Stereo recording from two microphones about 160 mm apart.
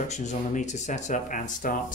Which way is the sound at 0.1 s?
50° left (ahead or behind).